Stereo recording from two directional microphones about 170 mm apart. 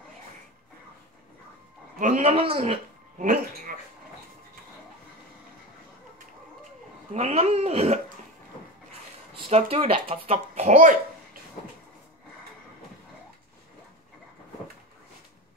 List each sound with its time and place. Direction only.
2.0 s speech: 45° right (ahead or behind)
3.2 s speech: 55° right (ahead or behind)
7.2 s speech: 40° right (ahead or behind)
9.3 s speech: 35° right (ahead or behind)